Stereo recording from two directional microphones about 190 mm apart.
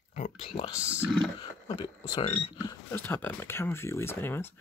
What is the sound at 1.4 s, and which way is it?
Speech, 25° left (ahead or behind).